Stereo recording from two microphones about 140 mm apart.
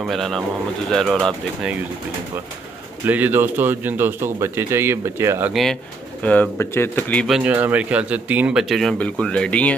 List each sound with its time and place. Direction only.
0.0 s speech: centre (ahead or behind)
3.1 s speech: 10° right (ahead or behind)
5.5 s speech: centre (ahead or behind)
7.2 s speech: 5° right (ahead or behind)